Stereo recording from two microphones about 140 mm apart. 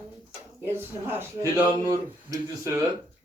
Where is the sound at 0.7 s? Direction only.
15° right (ahead or behind).